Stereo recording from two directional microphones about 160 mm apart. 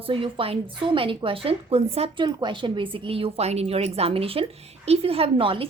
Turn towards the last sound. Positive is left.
turn(degrees=-35)  # may be behind; listen again after turning